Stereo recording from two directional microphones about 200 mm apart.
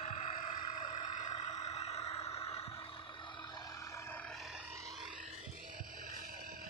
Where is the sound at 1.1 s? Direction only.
35° left (ahead or behind).